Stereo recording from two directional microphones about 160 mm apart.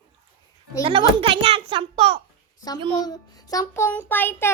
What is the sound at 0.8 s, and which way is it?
A child's voice, 35° right (ahead or behind).